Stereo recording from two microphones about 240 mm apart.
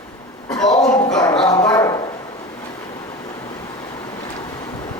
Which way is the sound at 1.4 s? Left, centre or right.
Centre.